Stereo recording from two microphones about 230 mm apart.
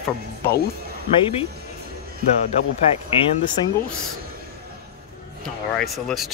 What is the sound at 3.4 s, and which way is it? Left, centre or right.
Speech, centre.